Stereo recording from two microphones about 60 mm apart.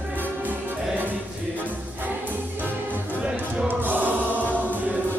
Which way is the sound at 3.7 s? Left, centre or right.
Right.